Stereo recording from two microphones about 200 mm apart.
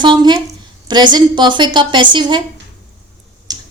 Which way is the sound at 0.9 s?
20° right (ahead or behind).